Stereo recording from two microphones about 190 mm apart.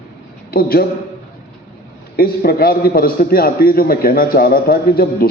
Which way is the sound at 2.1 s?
50° left (ahead or behind).